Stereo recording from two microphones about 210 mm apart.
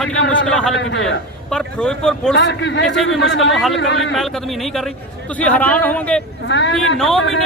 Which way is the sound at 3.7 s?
60° left (ahead or behind).